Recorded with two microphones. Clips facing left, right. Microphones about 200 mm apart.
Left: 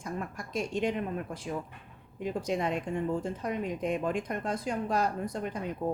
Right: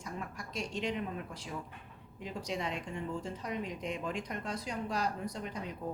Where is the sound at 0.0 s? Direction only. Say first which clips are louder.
Left 5 dB; 50° left (ahead or behind).